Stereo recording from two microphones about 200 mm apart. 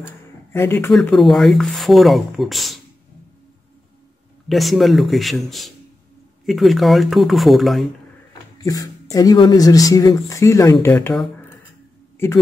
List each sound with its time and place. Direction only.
0.0 s speech: 10° left (ahead or behind)
4.5 s speech: centre (ahead or behind)
8.6 s speech: 20° left (ahead or behind)